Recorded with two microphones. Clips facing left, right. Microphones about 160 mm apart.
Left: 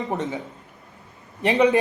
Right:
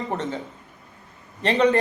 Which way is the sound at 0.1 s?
15° left (ahead or behind).